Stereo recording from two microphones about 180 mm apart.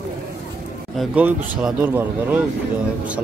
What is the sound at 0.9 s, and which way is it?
Speech, 5° right (ahead or behind).